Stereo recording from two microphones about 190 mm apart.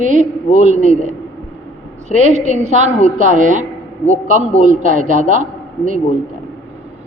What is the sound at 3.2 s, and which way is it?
A man's voice, 45° right (ahead or behind).